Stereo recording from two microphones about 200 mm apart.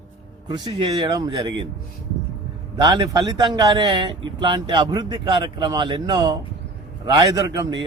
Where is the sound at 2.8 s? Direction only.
15° right (ahead or behind).